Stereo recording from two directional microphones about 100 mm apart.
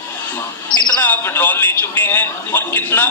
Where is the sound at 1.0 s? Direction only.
20° left (ahead or behind).